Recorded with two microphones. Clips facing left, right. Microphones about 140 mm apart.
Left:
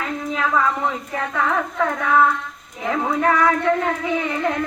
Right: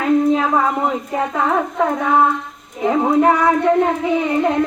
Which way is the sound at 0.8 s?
30° right (ahead or behind).